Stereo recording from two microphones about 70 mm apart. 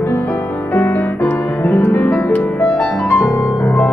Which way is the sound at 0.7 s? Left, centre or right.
Left.